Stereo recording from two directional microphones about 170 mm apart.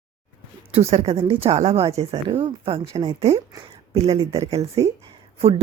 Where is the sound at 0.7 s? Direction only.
40° right (ahead or behind).